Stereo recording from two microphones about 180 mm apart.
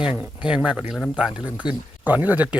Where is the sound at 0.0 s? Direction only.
10° right (ahead or behind).